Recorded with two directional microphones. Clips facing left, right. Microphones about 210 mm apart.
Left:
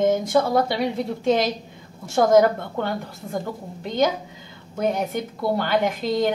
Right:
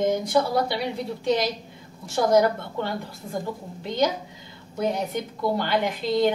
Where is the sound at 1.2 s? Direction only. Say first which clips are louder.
Left 3 dB; 50° left (ahead or behind).